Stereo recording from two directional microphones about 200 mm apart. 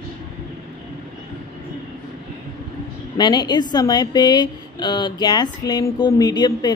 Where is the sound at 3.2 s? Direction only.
20° left (ahead or behind).